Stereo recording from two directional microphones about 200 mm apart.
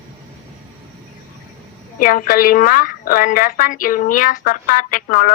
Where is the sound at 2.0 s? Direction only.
45° left (ahead or behind).